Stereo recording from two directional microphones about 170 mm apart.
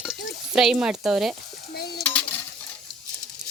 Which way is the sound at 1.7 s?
70° left (ahead or behind).